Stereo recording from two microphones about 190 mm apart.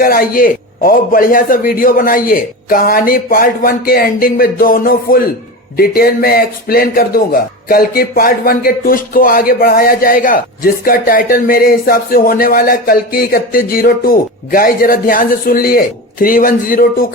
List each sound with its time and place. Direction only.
0.0 s speech: 50° left (ahead or behind)